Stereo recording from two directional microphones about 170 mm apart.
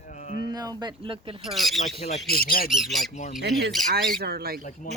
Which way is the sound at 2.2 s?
60° left (ahead or behind).